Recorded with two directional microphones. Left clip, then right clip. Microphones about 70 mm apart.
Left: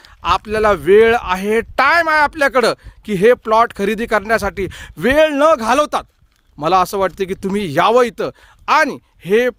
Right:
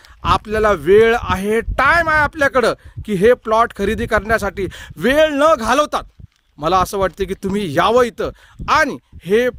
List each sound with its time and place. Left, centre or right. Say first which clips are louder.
0.2 s speech: even; left